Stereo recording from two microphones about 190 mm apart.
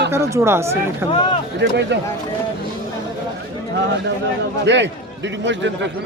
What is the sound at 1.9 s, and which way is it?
Speech, 70° right (ahead or behind).